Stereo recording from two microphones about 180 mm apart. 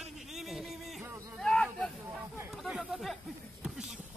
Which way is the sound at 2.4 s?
5° right (ahead or behind).